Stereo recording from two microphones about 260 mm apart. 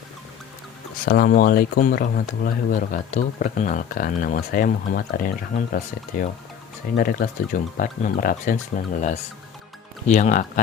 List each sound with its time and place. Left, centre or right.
1.0 s speech: left